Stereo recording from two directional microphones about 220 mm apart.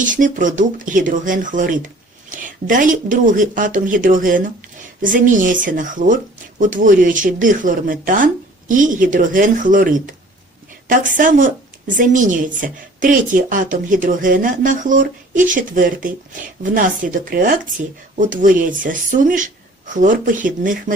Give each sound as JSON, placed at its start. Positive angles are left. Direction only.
{"t": 0.0, "sound": "a woman's voice", "side_deg": -35}